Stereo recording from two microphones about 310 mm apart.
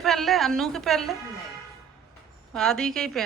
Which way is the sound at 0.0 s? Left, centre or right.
Centre.